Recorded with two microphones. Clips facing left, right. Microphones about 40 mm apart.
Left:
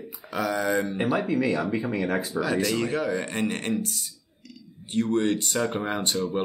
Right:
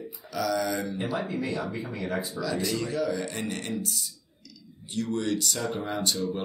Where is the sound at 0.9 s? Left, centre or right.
Left.